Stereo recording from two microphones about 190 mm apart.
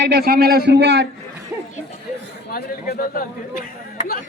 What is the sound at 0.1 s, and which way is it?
Speech, 55° right (ahead or behind).